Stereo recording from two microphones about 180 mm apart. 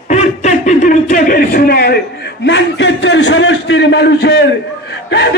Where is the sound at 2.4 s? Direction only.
80° left.